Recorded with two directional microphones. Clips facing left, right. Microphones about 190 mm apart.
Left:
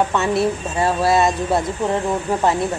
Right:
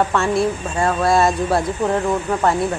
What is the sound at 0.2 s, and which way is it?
Speech, 5° left (ahead or behind).